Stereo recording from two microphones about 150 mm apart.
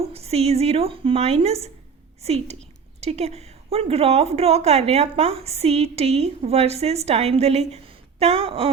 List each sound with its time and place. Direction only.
0.0 s a woman's voice: 40° right (ahead or behind)